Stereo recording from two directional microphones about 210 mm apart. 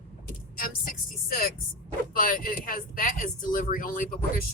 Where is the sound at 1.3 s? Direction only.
45° left (ahead or behind).